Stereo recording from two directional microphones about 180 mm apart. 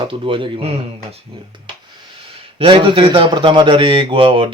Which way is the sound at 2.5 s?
30° right (ahead or behind).